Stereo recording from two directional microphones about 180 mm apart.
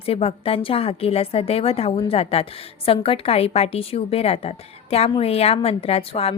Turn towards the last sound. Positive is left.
turn(degrees=35)  # may be behind; listen again after turning